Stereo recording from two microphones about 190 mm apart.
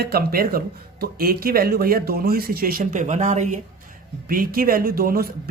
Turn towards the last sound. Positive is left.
turn(degrees=-50)  # may be behind; listen again after turning